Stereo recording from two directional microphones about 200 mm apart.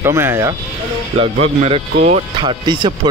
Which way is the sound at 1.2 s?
30° right (ahead or behind).